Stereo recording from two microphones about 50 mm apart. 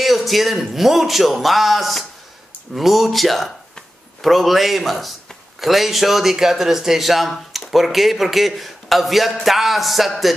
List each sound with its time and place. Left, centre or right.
0.0 s speech: centre